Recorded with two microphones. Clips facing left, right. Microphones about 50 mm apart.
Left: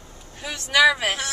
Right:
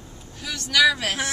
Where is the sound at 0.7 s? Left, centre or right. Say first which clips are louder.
Left 2 dB; left.